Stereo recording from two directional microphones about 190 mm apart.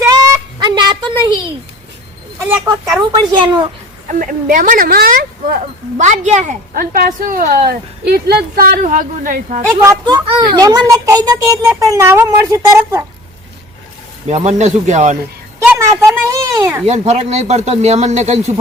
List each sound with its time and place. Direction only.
0.0 s fowl: 20° right (ahead or behind)
3.1 s speech: 25° right (ahead or behind)
4.1 s speech: 45° right (ahead or behind)
9.8 s speech: 20° right (ahead or behind)
14.3 s speech: 35° right (ahead or behind)
15.6 s a sound: 10° right (ahead or behind)
16.3 s speech: 15° right (ahead or behind)
16.8 s speech: 35° right (ahead or behind)